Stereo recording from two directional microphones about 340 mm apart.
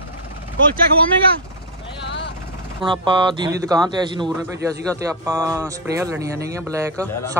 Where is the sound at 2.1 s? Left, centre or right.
Left.